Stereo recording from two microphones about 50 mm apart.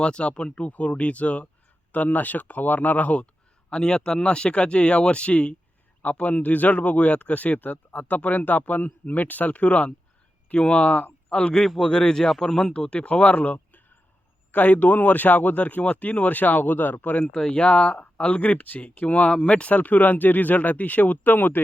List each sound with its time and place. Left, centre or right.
0.0 s speech: centre
3.7 s speech: centre; by 17.2 s left
17.3 s speech: left